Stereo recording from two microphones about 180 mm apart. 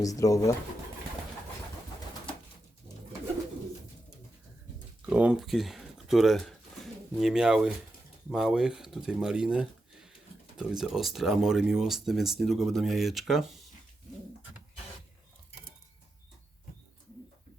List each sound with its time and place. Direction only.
0.0 s speech: 20° left (ahead or behind)
5.0 s speech: 5° right (ahead or behind)